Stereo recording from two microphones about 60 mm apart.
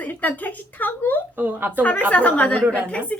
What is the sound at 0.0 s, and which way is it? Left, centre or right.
Speech, left.